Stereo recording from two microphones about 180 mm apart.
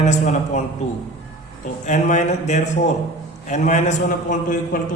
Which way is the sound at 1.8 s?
40° left (ahead or behind).